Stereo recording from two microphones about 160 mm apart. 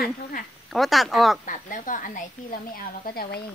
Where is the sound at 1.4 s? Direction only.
55° left (ahead or behind).